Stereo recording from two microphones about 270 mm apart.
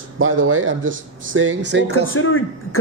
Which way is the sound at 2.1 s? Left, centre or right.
Left.